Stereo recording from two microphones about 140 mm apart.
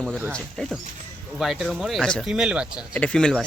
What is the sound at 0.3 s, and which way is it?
Speech, 5° left (ahead or behind).